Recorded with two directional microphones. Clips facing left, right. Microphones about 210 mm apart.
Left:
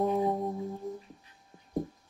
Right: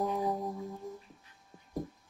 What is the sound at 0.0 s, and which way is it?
Music, 25° left (ahead or behind).